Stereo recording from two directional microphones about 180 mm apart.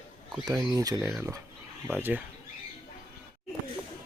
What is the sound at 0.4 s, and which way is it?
Speech, 20° right (ahead or behind).